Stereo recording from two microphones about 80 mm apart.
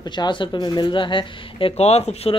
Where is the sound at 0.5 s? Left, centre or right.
Left.